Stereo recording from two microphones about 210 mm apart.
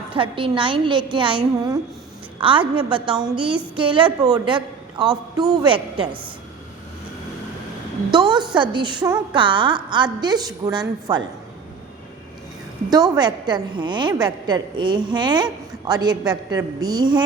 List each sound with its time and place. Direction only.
0.1 s a woman's voice: 25° right (ahead or behind)
2.4 s a woman's voice: 25° right (ahead or behind)
5.0 s a man's voice: centre (ahead or behind)
5.6 s a woman's voice: 25° right (ahead or behind)
8.1 s a woman's voice: 20° right (ahead or behind)
12.9 s a woman's voice: 20° right (ahead or behind)